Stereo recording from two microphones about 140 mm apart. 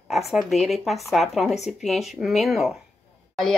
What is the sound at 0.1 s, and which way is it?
A woman's voice, centre (ahead or behind).